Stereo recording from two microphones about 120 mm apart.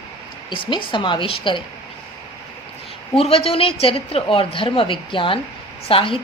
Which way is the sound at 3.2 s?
55° left (ahead or behind).